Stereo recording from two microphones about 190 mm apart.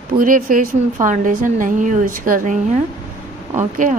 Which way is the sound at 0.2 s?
45° right (ahead or behind).